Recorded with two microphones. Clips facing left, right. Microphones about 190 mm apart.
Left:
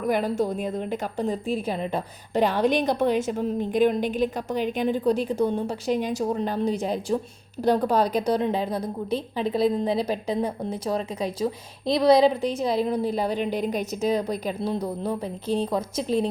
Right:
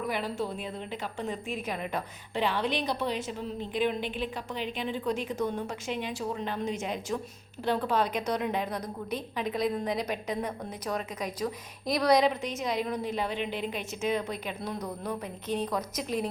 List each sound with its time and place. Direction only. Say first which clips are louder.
0.1 s a woman's voice: left 8 dB; 45° left (ahead or behind)
2.3 s a woman's voice: left 8 dB; 45° left (ahead or behind); by 16.3 s 30° left (ahead or behind)